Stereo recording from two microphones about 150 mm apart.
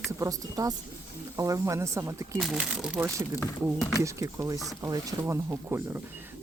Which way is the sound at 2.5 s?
5° right (ahead or behind).